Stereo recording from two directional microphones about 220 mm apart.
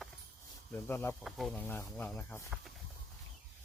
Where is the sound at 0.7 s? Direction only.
10° left (ahead or behind).